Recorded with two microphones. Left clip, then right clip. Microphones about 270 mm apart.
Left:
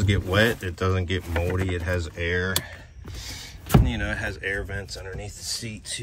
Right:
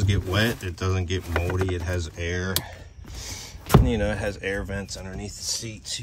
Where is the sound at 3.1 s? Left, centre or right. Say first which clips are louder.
Even; right.